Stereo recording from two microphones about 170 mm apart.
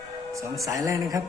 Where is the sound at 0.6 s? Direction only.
20° right (ahead or behind).